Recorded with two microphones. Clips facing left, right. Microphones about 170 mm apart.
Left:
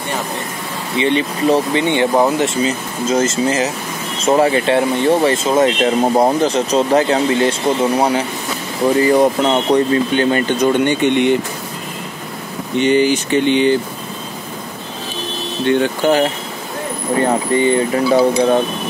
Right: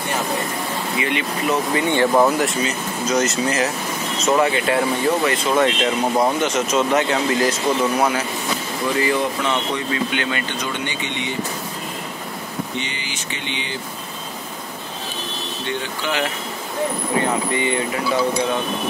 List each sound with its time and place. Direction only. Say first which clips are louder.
0.9 s speech: left 9 dB; 30° left (ahead or behind)
1.9 s speech: even; 20° left (ahead or behind)
8.8 s speech: left 9 dB; 45° left (ahead or behind)
10.8 s speech: left 13 dB; 55° left (ahead or behind)
12.7 s speech: left 16 dB; 50° left (ahead or behind)
15.6 s speech: left 13 dB; 60° left (ahead or behind)
17.3 s speech: left 7 dB; 35° left (ahead or behind)